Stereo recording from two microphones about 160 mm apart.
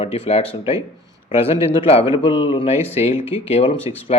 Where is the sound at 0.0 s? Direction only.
40° left (ahead or behind).